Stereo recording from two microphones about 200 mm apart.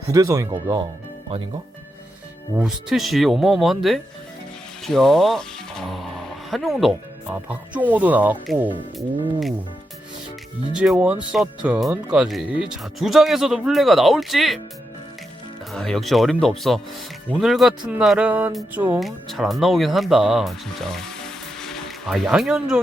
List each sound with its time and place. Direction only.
0.1 s speech: 15° right (ahead or behind)
2.6 s speech: centre (ahead or behind)
10.8 s speech: 5° right (ahead or behind)
15.7 s speech: centre (ahead or behind)